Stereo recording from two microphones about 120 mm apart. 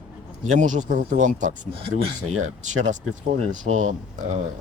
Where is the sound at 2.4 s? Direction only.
90° right.